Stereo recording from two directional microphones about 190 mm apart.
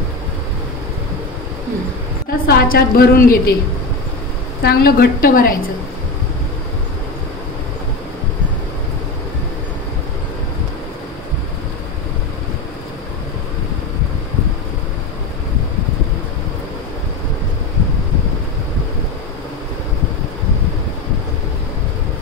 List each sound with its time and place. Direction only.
2.2 s a woman's voice: 55° left (ahead or behind)
4.6 s a woman's voice: 55° left (ahead or behind)